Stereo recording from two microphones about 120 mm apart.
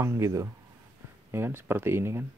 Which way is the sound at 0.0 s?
20° right (ahead or behind).